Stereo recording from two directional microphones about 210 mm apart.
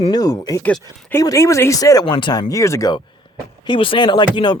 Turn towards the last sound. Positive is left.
turn(degrees=20)  # may be behind; listen again after turning